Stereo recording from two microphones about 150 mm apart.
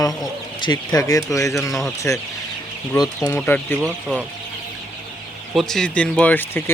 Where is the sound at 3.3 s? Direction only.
10° left (ahead or behind).